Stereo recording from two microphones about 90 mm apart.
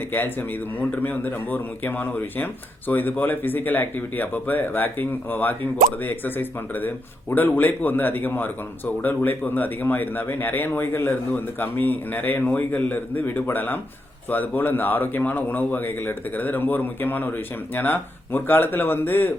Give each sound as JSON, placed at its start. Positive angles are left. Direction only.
{"t": 0.1, "sound": "speech", "side_deg": 20}